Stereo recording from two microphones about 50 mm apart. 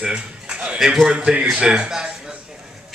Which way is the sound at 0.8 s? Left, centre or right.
Centre.